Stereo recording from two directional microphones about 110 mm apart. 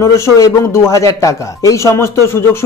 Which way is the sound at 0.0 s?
30° left (ahead or behind).